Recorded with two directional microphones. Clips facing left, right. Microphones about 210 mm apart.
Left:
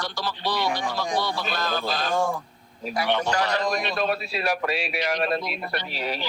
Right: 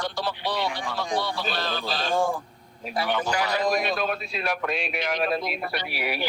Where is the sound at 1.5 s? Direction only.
45° left (ahead or behind).